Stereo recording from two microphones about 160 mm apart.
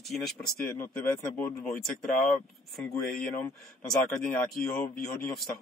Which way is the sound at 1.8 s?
Centre (ahead or behind).